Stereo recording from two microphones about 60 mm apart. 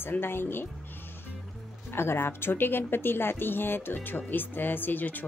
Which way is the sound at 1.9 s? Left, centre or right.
Left.